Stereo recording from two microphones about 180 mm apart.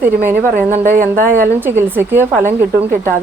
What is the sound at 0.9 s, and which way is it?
Speech, 50° right (ahead or behind).